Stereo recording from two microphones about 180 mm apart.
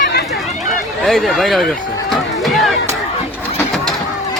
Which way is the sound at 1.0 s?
Centre (ahead or behind).